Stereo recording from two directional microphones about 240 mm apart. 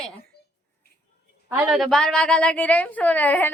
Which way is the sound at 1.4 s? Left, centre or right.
Centre.